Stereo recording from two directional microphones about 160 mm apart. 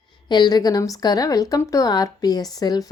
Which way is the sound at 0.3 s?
25° left (ahead or behind).